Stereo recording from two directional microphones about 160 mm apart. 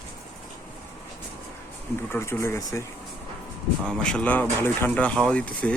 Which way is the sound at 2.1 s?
15° left (ahead or behind).